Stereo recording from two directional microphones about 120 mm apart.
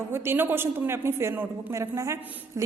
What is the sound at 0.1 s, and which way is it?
A woman's voice, 20° right (ahead or behind).